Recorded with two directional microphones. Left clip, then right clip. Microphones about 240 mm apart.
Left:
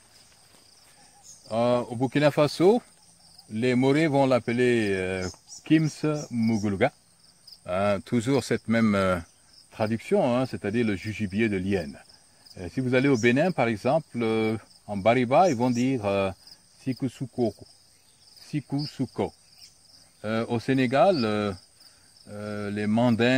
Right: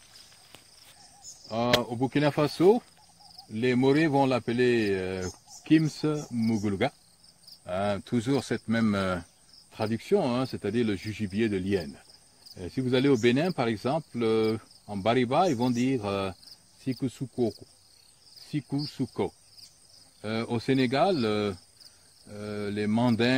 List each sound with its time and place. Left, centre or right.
1.5 s speech: left